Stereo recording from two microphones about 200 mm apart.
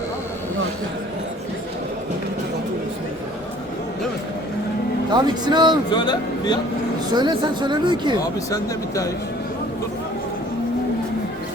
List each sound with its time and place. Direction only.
5.1 s a woman's voice: 20° right (ahead or behind)
5.9 s speech: 20° left (ahead or behind)
7.1 s a woman's voice: 20° right (ahead or behind)